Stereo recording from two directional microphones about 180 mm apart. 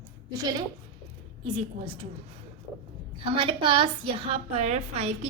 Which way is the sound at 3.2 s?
30° right (ahead or behind).